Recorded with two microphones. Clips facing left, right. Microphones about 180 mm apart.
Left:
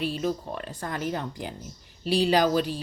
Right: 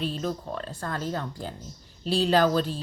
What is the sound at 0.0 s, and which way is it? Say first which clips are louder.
Speech: left 2 dB; 10° left (ahead or behind).